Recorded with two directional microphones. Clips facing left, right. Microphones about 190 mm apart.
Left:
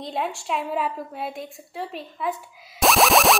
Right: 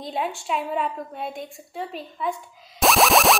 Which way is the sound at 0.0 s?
Centre (ahead or behind).